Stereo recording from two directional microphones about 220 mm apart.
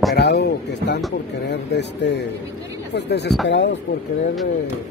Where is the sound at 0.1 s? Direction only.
50° left (ahead or behind).